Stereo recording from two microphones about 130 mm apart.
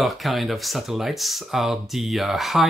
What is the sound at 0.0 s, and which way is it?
Speech, centre (ahead or behind).